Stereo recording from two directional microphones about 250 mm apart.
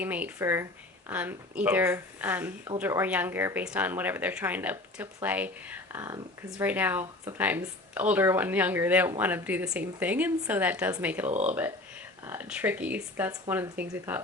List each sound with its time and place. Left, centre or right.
0.0 s speech: centre
11.3 s speech: right
11.5 s speech: centre